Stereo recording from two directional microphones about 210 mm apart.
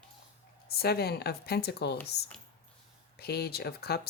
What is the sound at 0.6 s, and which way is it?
Speech, 50° left (ahead or behind).